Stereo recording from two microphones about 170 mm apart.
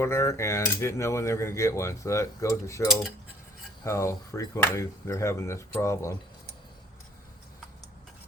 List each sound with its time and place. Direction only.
0.0 s cutlery: 15° left (ahead or behind)